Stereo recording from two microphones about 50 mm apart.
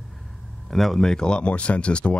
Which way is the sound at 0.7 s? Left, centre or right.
Centre.